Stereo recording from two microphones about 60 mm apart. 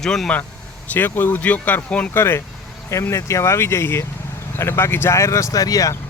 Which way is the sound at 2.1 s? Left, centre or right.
Left.